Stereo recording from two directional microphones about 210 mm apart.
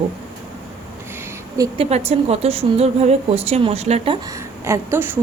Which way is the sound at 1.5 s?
30° right (ahead or behind).